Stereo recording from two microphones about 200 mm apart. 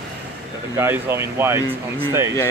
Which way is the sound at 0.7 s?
10° right (ahead or behind).